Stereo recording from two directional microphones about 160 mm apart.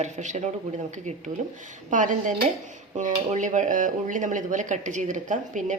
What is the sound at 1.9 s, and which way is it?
A woman's voice, 50° right (ahead or behind).